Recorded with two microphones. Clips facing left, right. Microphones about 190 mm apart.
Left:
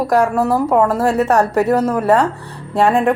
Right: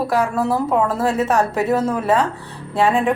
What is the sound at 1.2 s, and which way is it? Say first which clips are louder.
Speech: left 4 dB; 40° left (ahead or behind).